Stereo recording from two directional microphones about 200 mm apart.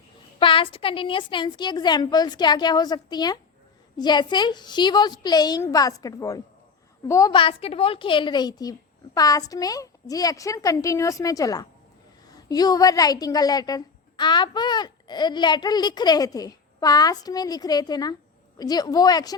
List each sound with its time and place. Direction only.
0.3 s a woman's voice: 25° left (ahead or behind)